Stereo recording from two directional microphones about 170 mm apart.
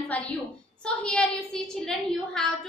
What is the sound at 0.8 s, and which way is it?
A woman's voice, 5° left (ahead or behind).